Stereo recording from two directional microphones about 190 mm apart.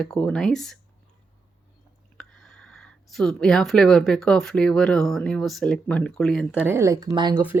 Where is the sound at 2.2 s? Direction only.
Centre (ahead or behind).